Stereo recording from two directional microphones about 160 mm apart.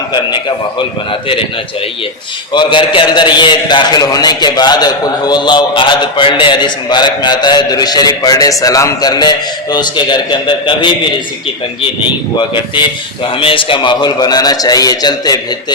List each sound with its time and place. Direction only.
0.1 s a man's voice: 30° left (ahead or behind)
2.5 s a man's voice: 30° left (ahead or behind)
12.4 s a man's voice: 30° left (ahead or behind)